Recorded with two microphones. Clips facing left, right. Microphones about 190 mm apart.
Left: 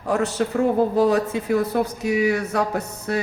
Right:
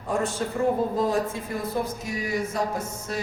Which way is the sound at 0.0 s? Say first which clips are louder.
Left 5 dB; 75° left (ahead or behind).